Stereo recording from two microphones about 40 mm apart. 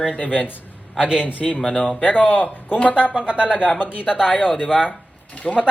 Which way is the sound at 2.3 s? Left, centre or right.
Left.